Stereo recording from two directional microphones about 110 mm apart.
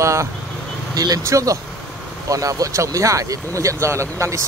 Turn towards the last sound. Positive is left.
turn(degrees=-25)  # may be behind; listen again after turning